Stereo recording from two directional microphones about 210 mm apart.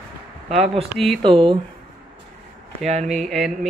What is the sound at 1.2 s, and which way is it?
Speech, 25° right (ahead or behind).